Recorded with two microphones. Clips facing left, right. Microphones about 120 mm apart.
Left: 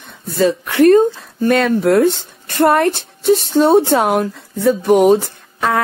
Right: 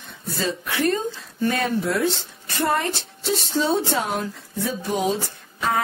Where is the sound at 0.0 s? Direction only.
55° left (ahead or behind).